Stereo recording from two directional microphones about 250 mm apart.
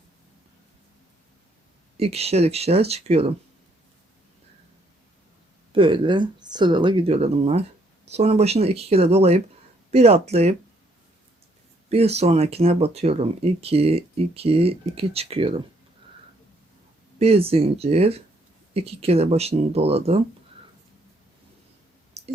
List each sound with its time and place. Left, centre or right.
2.0 s speech: right
5.7 s speech: centre
11.9 s speech: right
17.2 s speech: right
22.2 s clicking: right